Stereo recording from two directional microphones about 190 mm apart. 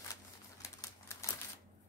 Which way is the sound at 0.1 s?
15° left (ahead or behind).